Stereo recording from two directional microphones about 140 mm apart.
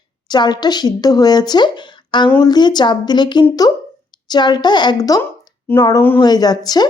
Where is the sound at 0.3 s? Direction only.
30° left (ahead or behind).